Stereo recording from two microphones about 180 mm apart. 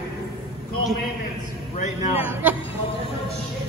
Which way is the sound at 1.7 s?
40° left (ahead or behind).